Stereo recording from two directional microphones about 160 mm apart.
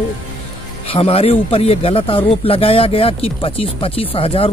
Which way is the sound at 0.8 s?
40° left (ahead or behind).